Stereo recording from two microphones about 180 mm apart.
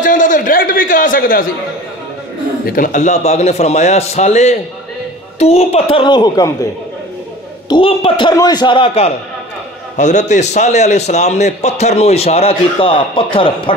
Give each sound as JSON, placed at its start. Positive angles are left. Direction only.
{"t": 0.0, "sound": "a sound", "side_deg": 45}
{"t": 2.6, "sound": "a man's voice", "side_deg": 50}
{"t": 7.7, "sound": "a man's voice", "side_deg": 30}
{"t": 9.9, "sound": "a man's voice", "side_deg": 40}